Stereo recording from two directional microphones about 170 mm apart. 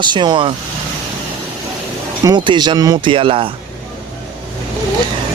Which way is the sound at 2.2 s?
25° right (ahead or behind).